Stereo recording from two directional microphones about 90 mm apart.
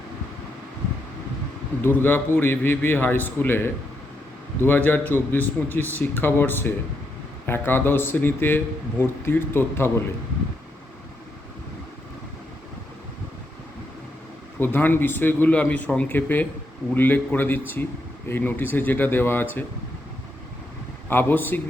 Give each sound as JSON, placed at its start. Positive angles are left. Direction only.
{"t": 1.8, "sound": "a man's voice", "side_deg": 25}
{"t": 14.6, "sound": "a man's voice", "side_deg": 20}
{"t": 21.1, "sound": "a man's voice", "side_deg": 25}